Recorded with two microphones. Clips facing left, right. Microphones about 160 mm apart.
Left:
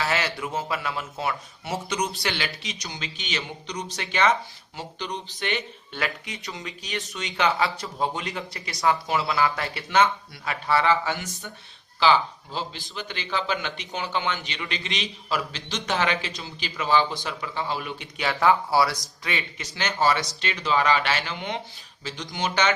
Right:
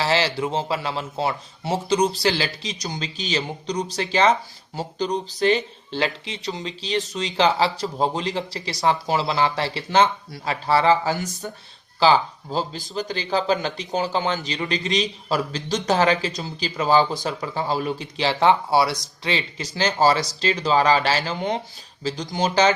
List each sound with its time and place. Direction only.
0.0 s a man's voice: 30° right (ahead or behind)